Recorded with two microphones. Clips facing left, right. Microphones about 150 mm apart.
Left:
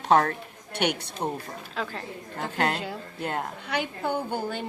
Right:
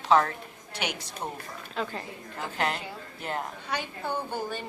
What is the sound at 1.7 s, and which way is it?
Speech, centre (ahead or behind).